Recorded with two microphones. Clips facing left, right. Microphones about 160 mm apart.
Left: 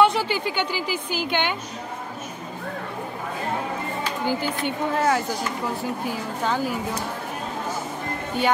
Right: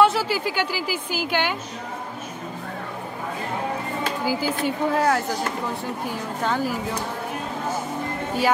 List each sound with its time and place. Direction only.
0.0 s a woman's voice: 5° right (ahead or behind)
4.2 s a woman's voice: 5° right (ahead or behind)